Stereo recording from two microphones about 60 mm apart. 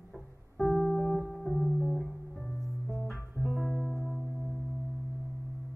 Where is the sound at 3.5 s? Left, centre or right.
Centre.